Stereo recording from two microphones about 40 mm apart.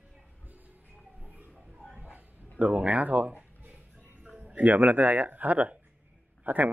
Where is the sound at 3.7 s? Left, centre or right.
Right.